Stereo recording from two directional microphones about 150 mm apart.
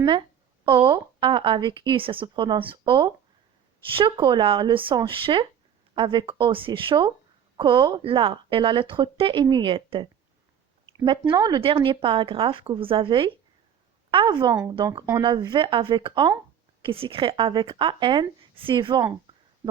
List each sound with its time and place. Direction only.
0.0 s a woman's voice: 35° right (ahead or behind)